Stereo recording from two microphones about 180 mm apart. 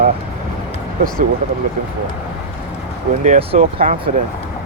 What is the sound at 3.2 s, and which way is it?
Speech, 35° right (ahead or behind).